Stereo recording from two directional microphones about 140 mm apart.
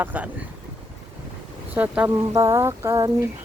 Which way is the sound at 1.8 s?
10° right (ahead or behind).